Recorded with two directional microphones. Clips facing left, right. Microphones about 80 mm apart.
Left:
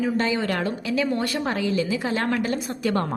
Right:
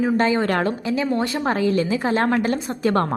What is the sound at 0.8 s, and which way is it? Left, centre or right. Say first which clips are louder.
Speech: right 2 dB; right.